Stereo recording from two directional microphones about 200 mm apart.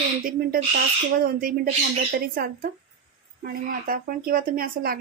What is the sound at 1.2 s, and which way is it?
Speech, 45° right (ahead or behind).